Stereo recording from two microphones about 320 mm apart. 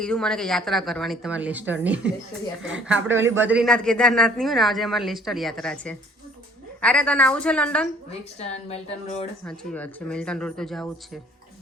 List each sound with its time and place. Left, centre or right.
0.0 s speech: centre
8.4 s speech: centre
9.4 s speech: centre